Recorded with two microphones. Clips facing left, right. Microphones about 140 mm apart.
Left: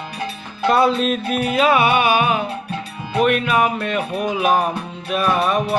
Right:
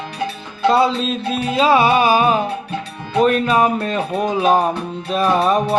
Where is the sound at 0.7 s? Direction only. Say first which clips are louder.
Even; 25° right (ahead or behind).